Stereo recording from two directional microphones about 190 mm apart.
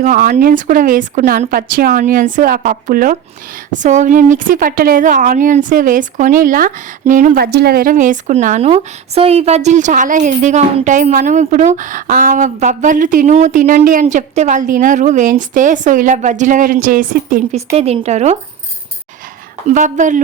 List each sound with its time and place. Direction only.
0.0 s a woman's voice: 45° right (ahead or behind)
17.7 s a woman's voice: 35° right (ahead or behind)
19.7 s a woman's voice: 40° right (ahead or behind)